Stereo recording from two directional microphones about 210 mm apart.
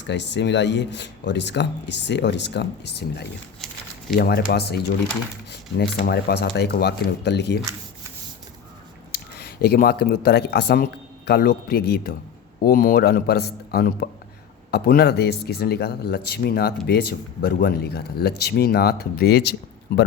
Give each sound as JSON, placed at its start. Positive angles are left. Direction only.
{"t": 0.1, "sound": "speech", "side_deg": 55}
{"t": 6.0, "sound": "speech", "side_deg": 50}
{"t": 9.1, "sound": "speech", "side_deg": 50}